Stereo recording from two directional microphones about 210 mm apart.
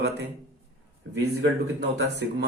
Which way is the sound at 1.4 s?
50° right (ahead or behind).